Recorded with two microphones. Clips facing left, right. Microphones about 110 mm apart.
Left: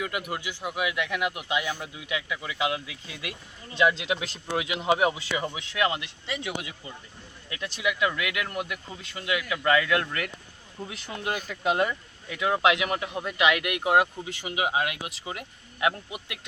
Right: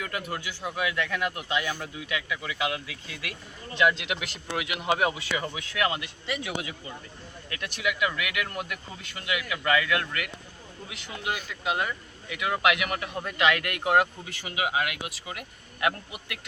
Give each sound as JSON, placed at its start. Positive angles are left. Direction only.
{"t": 0.0, "sound": "speech", "side_deg": 15}
{"t": 12.3, "sound": "speech", "side_deg": 30}